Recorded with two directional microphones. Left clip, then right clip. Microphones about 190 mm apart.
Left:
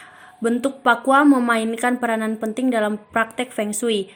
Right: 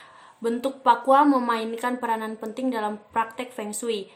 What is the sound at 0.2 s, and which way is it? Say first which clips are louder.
Speech: left 5 dB; 25° left (ahead or behind).